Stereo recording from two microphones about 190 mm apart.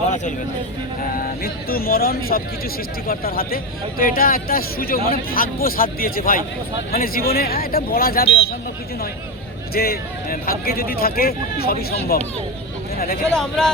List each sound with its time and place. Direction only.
1.1 s a man's voice: 50° left (ahead or behind)
9.7 s a man's voice: 50° left (ahead or behind)
13.0 s a man's voice: 55° left (ahead or behind)
13.3 s speech: 5° left (ahead or behind)